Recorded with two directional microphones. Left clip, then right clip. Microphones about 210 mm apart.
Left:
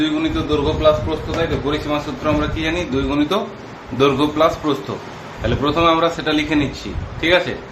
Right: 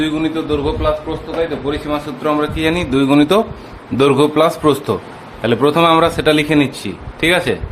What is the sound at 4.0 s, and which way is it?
Speech, 50° right (ahead or behind).